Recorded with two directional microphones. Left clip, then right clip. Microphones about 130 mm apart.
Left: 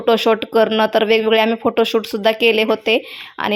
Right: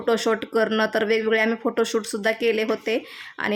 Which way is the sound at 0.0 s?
20° left (ahead or behind).